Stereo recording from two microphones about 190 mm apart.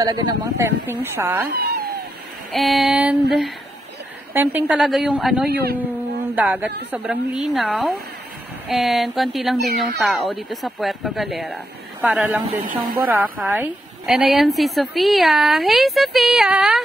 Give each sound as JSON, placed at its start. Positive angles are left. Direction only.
{"t": 0.0, "sound": "speech", "side_deg": -20}
{"t": 2.5, "sound": "a woman's voice", "side_deg": 0}
{"t": 5.5, "sound": "a man's voice", "side_deg": -55}
{"t": 5.9, "sound": "a woman's voice", "side_deg": -10}